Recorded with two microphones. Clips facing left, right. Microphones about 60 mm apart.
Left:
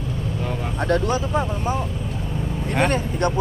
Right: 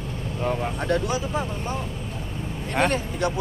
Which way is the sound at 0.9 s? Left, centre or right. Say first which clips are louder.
Left 5 dB; centre.